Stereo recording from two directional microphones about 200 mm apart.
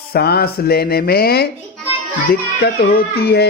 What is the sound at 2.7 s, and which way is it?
Speech, 50° left (ahead or behind).